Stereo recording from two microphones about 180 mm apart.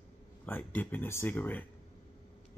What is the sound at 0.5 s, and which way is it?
Speech, 10° left (ahead or behind).